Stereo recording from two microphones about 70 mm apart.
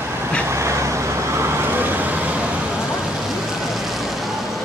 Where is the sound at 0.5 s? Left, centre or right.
Right.